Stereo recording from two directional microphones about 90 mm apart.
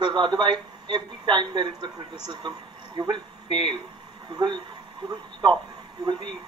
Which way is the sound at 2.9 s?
65° right (ahead or behind).